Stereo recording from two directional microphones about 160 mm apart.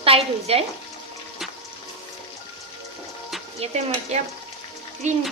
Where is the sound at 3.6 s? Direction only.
45° right (ahead or behind).